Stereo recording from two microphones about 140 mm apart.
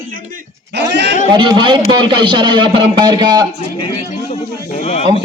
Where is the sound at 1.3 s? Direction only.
35° right (ahead or behind).